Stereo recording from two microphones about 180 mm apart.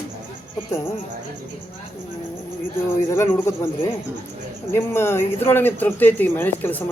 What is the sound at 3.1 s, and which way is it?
Speech, 15° left (ahead or behind).